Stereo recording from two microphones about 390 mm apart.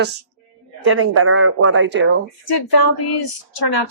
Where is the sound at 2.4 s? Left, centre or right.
Left.